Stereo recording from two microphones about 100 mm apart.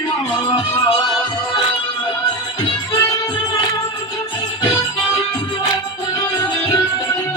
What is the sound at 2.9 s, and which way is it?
Music, 35° left (ahead or behind).